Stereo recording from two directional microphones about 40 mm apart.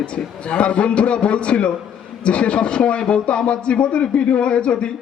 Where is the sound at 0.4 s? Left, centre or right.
Left.